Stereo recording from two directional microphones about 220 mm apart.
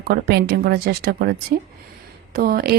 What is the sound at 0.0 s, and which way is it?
Speech, 45° right (ahead or behind).